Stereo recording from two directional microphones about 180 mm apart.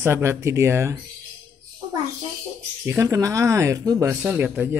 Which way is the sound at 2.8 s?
15° right (ahead or behind).